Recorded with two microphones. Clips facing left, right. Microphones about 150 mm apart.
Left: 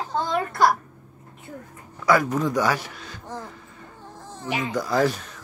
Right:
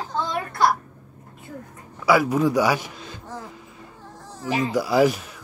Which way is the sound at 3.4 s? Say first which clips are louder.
Right 1 dB; 15° right (ahead or behind).